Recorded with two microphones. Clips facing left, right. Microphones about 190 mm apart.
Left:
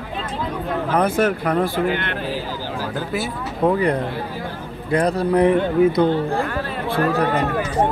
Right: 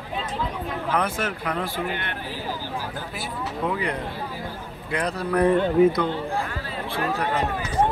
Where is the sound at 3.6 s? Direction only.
45° left (ahead or behind).